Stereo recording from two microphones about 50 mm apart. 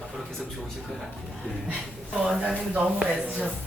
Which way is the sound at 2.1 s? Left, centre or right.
Centre.